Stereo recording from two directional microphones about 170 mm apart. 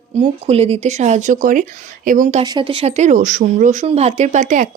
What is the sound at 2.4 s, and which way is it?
Speech, 30° right (ahead or behind).